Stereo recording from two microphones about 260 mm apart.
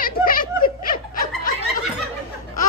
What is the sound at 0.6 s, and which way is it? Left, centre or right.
Snicker, left.